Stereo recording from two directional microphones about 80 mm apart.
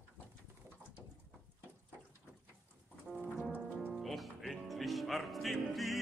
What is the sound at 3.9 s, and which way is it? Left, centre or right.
Music, centre.